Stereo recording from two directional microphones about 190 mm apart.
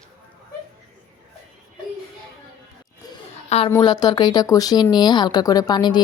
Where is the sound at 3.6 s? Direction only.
20° left (ahead or behind).